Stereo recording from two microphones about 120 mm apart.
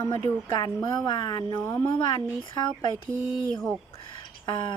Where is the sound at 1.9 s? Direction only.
40° left (ahead or behind).